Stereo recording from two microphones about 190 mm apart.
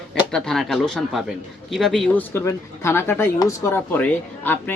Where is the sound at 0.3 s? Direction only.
5° left (ahead or behind).